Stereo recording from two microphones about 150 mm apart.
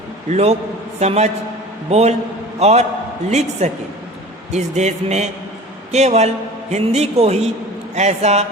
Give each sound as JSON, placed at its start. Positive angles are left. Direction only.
{"t": 0.3, "sound": "a man's voice", "side_deg": -45}